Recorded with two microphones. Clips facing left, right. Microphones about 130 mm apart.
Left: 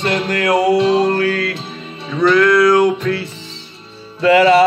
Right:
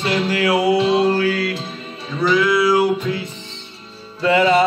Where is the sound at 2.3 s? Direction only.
60° left (ahead or behind).